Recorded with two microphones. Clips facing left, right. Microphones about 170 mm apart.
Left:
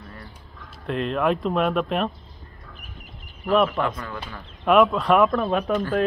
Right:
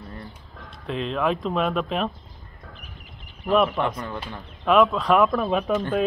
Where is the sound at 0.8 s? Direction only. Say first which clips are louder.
Left 2 dB; centre (ahead or behind).